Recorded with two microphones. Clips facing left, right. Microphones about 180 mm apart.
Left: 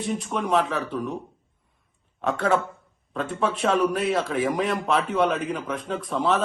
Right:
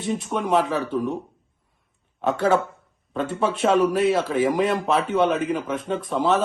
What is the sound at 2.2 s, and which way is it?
Speech, 25° right (ahead or behind).